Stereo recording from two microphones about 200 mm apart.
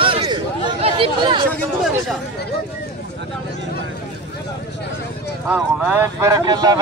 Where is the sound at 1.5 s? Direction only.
5° left (ahead or behind).